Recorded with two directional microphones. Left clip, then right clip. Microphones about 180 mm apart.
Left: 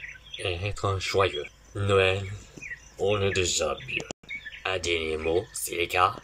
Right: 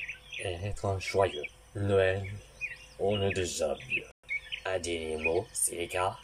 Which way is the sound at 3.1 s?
60° left (ahead or behind).